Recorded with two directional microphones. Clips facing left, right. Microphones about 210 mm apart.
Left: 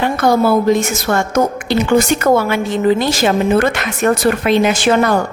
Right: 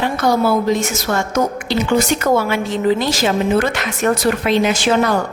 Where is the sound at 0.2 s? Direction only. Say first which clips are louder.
Left 3 dB; 55° left (ahead or behind).